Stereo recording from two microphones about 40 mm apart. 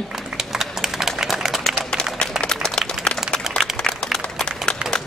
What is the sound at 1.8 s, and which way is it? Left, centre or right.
Applause, left.